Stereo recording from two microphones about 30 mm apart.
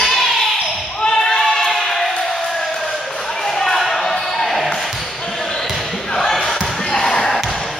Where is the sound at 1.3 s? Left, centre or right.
Centre.